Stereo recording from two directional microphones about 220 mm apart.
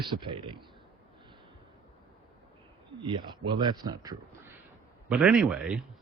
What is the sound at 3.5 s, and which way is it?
Speech, 20° right (ahead or behind).